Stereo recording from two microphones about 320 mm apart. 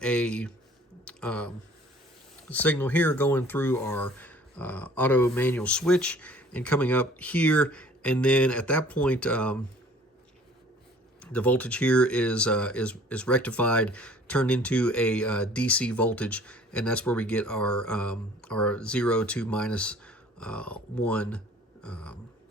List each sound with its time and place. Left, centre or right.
0.0 s speech: centre
11.2 s speech: centre